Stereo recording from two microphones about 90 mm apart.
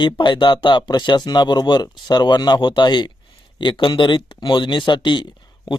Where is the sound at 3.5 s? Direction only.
70° left (ahead or behind).